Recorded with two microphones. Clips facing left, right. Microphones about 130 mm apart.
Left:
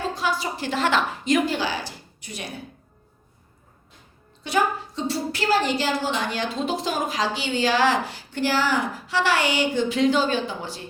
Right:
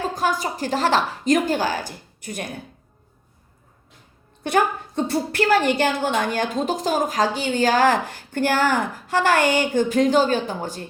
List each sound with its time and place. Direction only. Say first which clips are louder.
0.1 s a woman's voice: right 3 dB; 45° right (ahead or behind)
4.4 s a woman's voice: right 3 dB; 55° right (ahead or behind)